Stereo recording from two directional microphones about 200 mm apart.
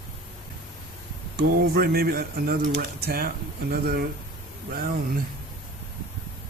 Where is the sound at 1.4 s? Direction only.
50° right (ahead or behind).